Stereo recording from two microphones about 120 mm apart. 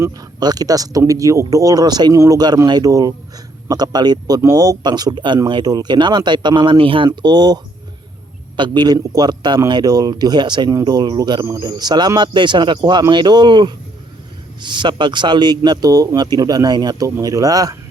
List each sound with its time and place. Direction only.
0.0 s a man's voice: 30° right (ahead or behind)